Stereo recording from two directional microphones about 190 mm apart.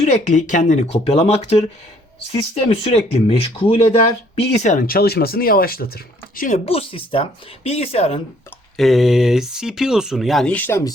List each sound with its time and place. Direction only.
0.0 s speech: 40° left (ahead or behind)
6.7 s speech: 30° left (ahead or behind)
8.8 s speech: centre (ahead or behind)